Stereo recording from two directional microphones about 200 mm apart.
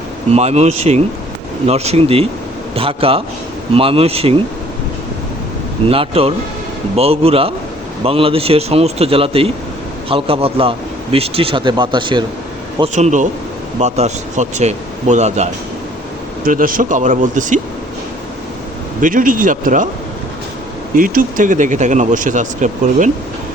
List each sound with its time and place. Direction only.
0.3 s speech: 35° right (ahead or behind)
5.9 s speech: 30° right (ahead or behind)
12.8 s speech: 35° right (ahead or behind)
16.5 s speech: 45° right (ahead or behind)
18.9 s speech: 40° right (ahead or behind)
20.9 s speech: 45° right (ahead or behind)